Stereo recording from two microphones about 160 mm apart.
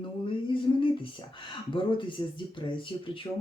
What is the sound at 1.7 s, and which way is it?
Speech, 30° left (ahead or behind).